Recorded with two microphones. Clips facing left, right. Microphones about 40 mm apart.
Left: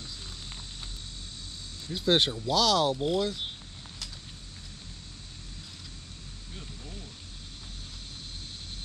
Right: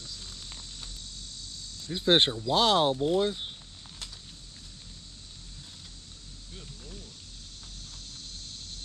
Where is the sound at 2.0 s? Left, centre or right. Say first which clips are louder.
Right 2 dB; right.